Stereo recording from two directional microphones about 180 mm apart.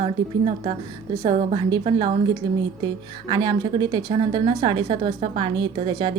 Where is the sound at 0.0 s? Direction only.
30° right (ahead or behind).